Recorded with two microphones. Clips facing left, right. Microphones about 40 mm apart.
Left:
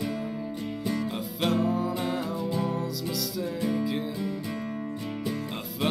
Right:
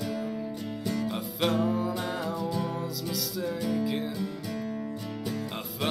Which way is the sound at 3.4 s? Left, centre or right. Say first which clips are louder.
Even; centre.